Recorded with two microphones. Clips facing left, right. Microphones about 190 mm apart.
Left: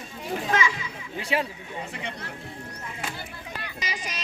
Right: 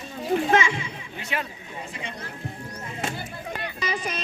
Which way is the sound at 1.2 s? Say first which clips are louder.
Left 5 dB; 30° left (ahead or behind).